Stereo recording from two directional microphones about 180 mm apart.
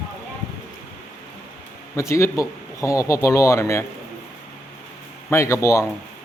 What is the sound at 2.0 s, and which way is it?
Speech, 15° left (ahead or behind).